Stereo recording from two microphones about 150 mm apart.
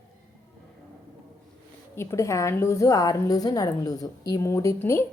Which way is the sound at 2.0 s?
20° left (ahead or behind).